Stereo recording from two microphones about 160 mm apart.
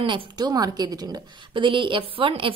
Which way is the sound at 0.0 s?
30° right (ahead or behind).